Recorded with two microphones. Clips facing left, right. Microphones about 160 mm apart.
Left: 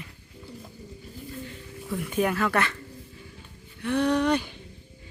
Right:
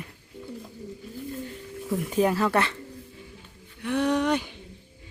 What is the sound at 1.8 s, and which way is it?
Speech, 40° right (ahead or behind).